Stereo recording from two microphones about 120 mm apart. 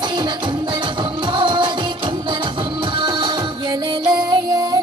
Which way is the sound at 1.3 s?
40° right (ahead or behind).